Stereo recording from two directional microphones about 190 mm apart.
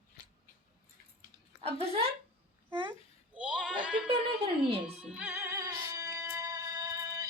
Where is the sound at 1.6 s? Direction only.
30° right (ahead or behind).